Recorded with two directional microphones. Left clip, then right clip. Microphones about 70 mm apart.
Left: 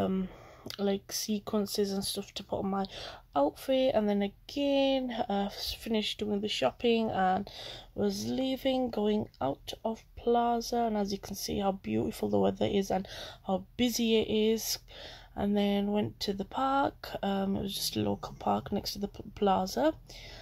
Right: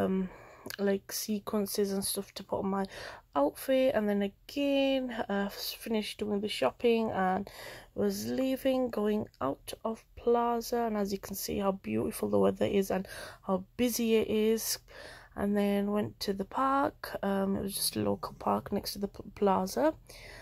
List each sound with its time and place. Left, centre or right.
0.7 s speech: right
15.8 s speech: centre
16.2 s speech: right